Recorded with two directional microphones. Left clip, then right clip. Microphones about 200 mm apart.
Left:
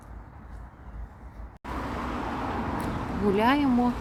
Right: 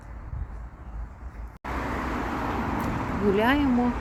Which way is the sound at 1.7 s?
55° right (ahead or behind).